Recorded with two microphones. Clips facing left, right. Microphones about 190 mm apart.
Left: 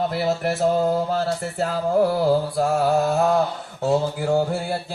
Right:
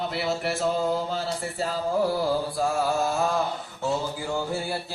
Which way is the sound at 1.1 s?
55° left (ahead or behind).